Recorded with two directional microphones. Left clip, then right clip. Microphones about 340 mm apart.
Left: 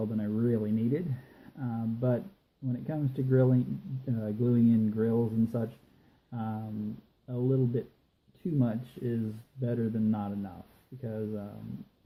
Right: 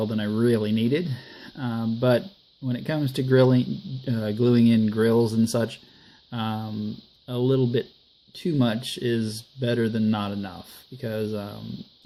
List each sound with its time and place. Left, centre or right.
0.2 s speech: right